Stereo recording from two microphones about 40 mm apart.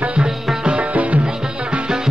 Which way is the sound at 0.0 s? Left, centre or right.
Right.